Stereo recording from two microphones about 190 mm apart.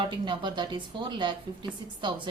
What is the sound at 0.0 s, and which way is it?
Speech, 25° right (ahead or behind).